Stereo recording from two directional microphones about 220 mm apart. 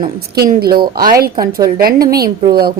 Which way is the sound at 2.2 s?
45° right (ahead or behind).